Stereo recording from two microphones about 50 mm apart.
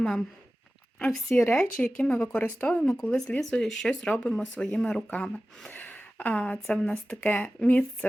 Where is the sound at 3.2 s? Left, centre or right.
Left.